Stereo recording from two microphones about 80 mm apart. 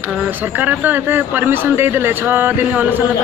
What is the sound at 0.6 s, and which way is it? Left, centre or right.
Speech, right.